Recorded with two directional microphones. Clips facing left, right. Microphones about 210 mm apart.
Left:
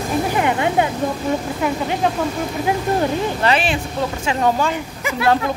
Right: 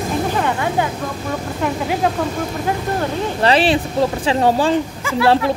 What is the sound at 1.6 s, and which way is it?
Speech, 5° right (ahead or behind).